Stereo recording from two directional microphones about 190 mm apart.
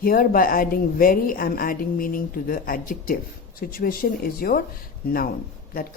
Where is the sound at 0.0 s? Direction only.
50° left (ahead or behind).